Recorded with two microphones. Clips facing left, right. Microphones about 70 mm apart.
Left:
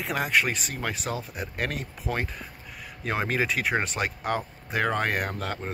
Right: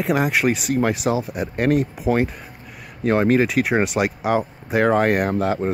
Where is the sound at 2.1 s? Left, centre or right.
Right.